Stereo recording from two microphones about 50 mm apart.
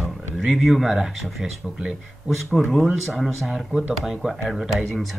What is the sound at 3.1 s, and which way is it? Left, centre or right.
Speech, centre.